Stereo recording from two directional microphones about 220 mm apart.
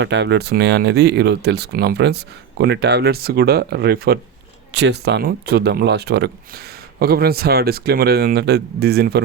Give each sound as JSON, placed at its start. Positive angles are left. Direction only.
{"t": 0.0, "sound": "speech", "side_deg": -50}